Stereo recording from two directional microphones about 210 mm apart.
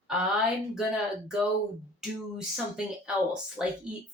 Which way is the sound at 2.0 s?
Centre (ahead or behind).